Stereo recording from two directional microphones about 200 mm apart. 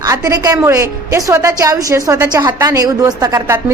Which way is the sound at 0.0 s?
15° right (ahead or behind).